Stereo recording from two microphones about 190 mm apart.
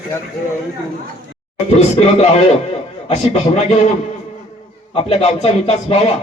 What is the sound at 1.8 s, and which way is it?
A man's voice, 35° left (ahead or behind).